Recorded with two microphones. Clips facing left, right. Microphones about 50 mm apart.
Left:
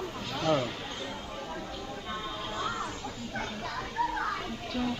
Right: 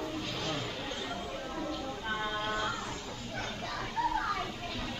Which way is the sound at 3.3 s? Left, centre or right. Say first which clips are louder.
Left 2 dB; centre.